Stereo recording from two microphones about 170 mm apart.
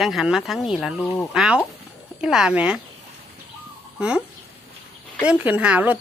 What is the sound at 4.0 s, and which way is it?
Speech, 5° right (ahead or behind).